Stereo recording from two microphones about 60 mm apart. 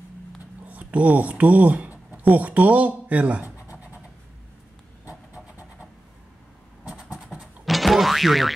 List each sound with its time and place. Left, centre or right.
0.7 s speech: right
5.3 s a sound: right
6.8 s vehicle: centre
7.6 s boing: centre